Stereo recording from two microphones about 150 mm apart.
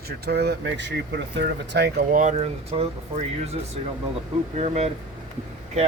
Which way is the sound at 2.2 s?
45° right (ahead or behind).